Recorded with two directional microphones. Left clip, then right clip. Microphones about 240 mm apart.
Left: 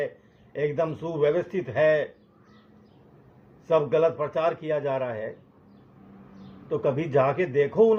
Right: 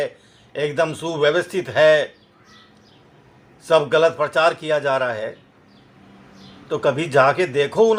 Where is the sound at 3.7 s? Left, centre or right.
Right.